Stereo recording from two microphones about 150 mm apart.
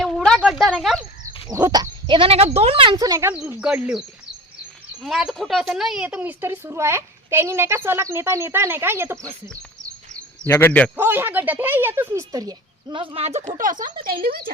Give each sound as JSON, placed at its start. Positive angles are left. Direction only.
{"t": 0.0, "sound": "a sound", "side_deg": 0}
{"t": 0.7, "sound": "speech", "side_deg": 5}
{"t": 1.5, "sound": "speech", "side_deg": -20}
{"t": 3.6, "sound": "a woman's voice", "side_deg": -10}
{"t": 5.0, "sound": "a woman's voice", "side_deg": 0}
{"t": 10.2, "sound": "speech", "side_deg": 15}
{"t": 10.9, "sound": "a woman's voice", "side_deg": -15}
{"t": 13.6, "sound": "speech", "side_deg": -60}
{"t": 14.0, "sound": "speech", "side_deg": -75}